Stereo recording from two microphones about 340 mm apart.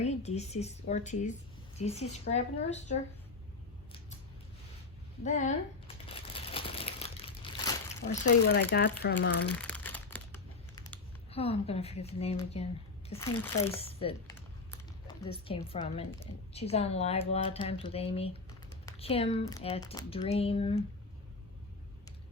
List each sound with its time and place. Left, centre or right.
0.0 s speech: centre
5.2 s speech: left
6.1 s a sound: centre
8.0 s speech: left
9.5 s crumpling: centre
11.3 s a woman's voice: centre